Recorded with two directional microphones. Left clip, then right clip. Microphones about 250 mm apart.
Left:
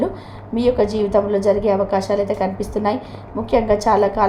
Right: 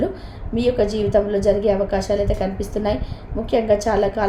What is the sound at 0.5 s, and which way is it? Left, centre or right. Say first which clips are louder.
A woman's voice: left 2 dB; centre.